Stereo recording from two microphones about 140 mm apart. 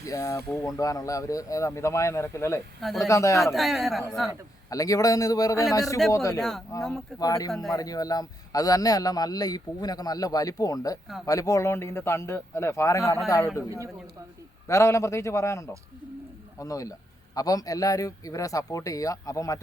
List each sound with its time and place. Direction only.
0.0 s a man's voice: 20° left (ahead or behind)
2.8 s speech: centre (ahead or behind)
3.1 s a man's voice: 20° left (ahead or behind)
3.4 s speech: centre (ahead or behind)
4.7 s a man's voice: 25° left (ahead or behind)
14.7 s a man's voice: 20° left (ahead or behind)